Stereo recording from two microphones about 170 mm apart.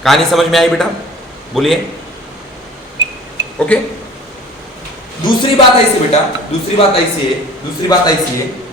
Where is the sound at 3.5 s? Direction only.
10° left (ahead or behind).